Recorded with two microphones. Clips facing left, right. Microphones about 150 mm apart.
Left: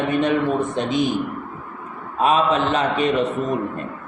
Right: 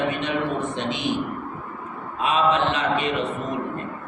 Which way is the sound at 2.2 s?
40° left (ahead or behind).